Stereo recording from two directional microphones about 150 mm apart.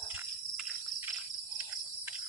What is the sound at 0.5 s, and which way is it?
Bird vocalization, 5° right (ahead or behind).